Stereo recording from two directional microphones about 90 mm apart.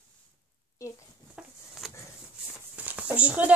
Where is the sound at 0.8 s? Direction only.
35° left (ahead or behind).